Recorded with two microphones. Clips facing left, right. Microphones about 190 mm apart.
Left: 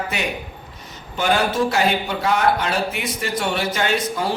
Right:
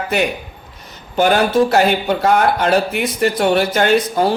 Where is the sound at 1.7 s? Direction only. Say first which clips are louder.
Right 6 dB; 50° right (ahead or behind).